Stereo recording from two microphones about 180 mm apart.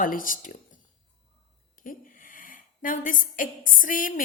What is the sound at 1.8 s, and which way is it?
A woman's voice, 50° left (ahead or behind).